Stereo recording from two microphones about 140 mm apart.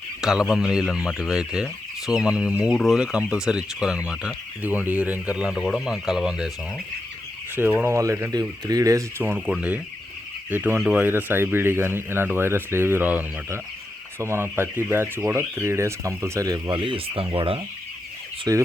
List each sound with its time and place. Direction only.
0.2 s speech: 5° right (ahead or behind)
7.5 s speech: 15° right (ahead or behind); by 17.6 s 40° right (ahead or behind)
18.5 s speech: 25° right (ahead or behind)